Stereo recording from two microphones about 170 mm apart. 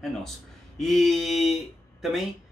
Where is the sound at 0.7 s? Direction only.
Centre (ahead or behind).